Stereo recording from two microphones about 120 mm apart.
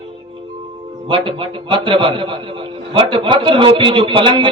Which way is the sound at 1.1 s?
45° right (ahead or behind).